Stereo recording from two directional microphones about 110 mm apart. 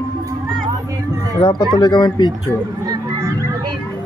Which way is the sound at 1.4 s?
45° left (ahead or behind).